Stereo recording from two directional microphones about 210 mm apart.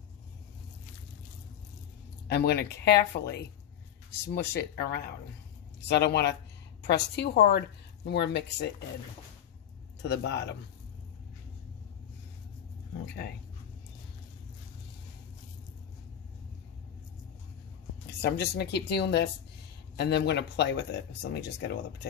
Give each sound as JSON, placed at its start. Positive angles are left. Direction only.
{"t": 2.2, "sound": "speech", "side_deg": 50}
{"t": 10.0, "sound": "a man's voice", "side_deg": 55}
{"t": 13.0, "sound": "speech", "side_deg": 50}
{"t": 18.2, "sound": "speech", "side_deg": 50}